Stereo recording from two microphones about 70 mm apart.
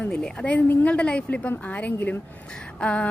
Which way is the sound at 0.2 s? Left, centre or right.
Centre.